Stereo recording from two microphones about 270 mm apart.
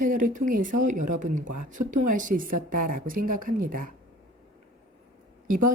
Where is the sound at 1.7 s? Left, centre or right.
Right.